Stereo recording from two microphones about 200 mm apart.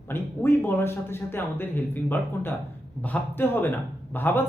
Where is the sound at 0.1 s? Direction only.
10° left (ahead or behind).